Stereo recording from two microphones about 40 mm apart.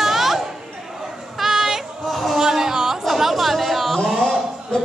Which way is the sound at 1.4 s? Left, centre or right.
Centre.